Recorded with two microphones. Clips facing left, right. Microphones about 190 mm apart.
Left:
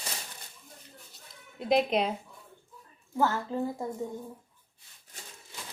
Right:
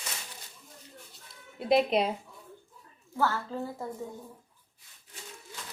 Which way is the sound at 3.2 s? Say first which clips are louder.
Left 2 dB; 20° left (ahead or behind).